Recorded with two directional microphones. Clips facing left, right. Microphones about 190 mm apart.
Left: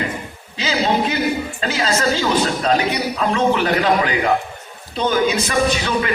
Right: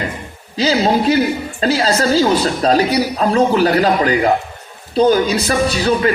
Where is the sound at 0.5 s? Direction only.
40° right (ahead or behind).